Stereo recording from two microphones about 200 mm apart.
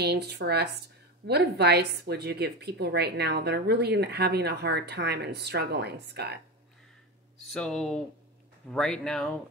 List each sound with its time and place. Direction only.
0.0 s a woman's voice: 55° right (ahead or behind)
7.4 s speech: 5° left (ahead or behind)